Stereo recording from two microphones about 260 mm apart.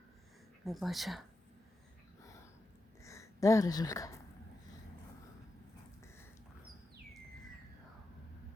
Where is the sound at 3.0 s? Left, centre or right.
Centre.